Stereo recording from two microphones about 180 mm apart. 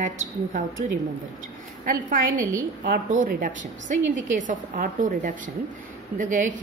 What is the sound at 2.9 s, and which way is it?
A woman's voice, 50° right (ahead or behind).